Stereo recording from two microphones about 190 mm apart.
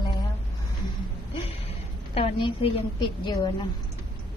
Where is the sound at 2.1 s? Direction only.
25° left (ahead or behind).